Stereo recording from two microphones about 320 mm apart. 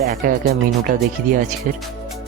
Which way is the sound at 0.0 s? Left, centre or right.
Right.